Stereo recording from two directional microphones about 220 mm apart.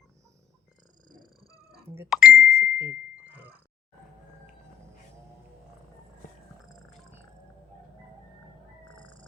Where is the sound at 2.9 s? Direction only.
10° right (ahead or behind).